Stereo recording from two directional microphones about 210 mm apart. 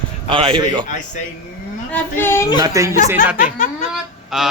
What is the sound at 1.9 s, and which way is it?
Speech, 10° left (ahead or behind).